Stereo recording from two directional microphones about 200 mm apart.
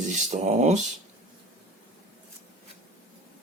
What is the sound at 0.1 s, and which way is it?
Speech, 35° right (ahead or behind).